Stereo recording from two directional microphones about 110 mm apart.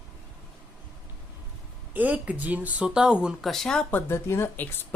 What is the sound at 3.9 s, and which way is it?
Speech, 20° left (ahead or behind).